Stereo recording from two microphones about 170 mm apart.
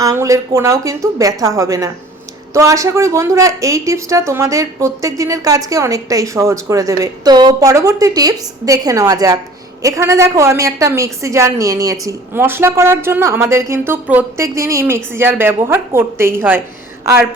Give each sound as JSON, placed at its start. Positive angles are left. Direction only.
{"t": 0.0, "sound": "a woman's voice", "side_deg": -20}